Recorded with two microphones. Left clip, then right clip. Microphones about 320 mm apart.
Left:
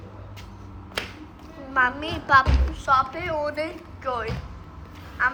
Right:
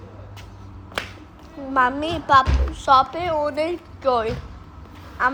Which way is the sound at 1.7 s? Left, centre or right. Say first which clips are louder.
Right 3 dB; centre.